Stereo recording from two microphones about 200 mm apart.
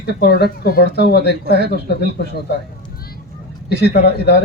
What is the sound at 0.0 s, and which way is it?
A man's voice, 55° left (ahead or behind).